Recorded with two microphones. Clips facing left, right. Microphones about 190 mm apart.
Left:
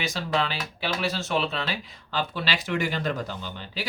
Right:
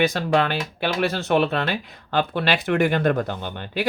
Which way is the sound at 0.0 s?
60° right (ahead or behind).